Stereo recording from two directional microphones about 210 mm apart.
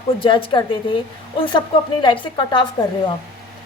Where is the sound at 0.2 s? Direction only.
25° left (ahead or behind).